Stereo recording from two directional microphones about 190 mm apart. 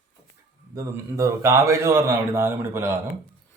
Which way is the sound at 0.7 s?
15° right (ahead or behind).